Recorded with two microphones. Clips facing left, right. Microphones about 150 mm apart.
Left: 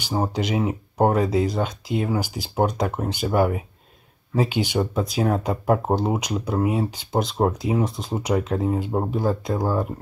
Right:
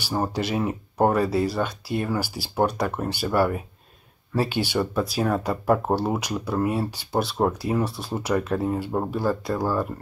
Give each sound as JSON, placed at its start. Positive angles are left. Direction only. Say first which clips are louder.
{"t": 0.0, "sound": "speech", "louder": "left 1 dB", "side_deg": 15}